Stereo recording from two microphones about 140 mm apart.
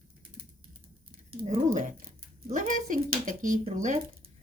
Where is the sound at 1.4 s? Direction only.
65° right (ahead or behind).